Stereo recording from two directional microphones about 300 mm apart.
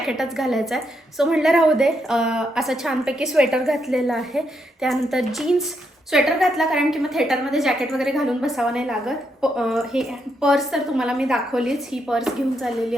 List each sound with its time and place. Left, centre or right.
0.1 s a woman's voice: centre